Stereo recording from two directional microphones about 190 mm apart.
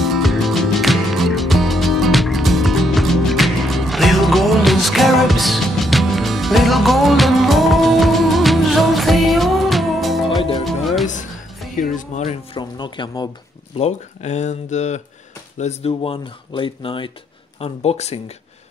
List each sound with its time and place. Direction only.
0.0 s music: centre (ahead or behind)
12.1 s a sound: 40° left (ahead or behind)
12.5 s speech: 25° left (ahead or behind)
13.7 s speech: 35° left (ahead or behind)